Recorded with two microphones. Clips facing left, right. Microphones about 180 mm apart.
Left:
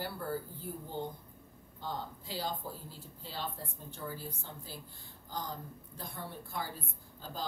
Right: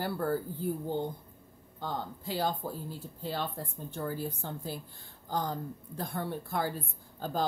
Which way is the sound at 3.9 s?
60° right (ahead or behind).